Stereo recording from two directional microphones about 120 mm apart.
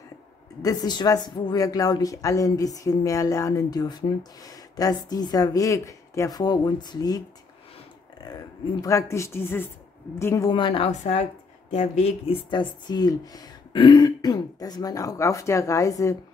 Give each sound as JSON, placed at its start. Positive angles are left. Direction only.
{"t": 0.6, "sound": "speech", "side_deg": 30}
{"t": 8.8, "sound": "speech", "side_deg": 25}
{"t": 10.5, "sound": "a woman's voice", "side_deg": 45}
{"t": 10.9, "sound": "speech", "side_deg": 70}